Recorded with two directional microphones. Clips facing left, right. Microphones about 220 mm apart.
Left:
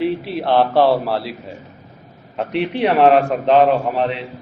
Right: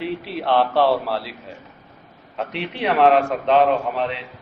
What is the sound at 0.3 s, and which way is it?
Speech, 35° left (ahead or behind).